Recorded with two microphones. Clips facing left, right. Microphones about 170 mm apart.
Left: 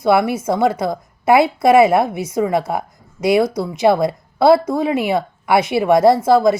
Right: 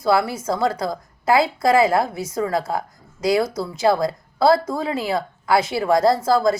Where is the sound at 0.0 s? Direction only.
20° left (ahead or behind).